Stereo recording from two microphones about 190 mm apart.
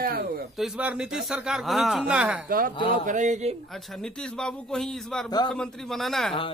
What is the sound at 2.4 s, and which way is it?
Speech, 50° right (ahead or behind).